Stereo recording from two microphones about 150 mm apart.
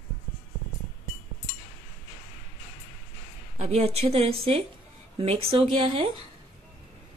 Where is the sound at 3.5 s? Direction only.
45° right (ahead or behind).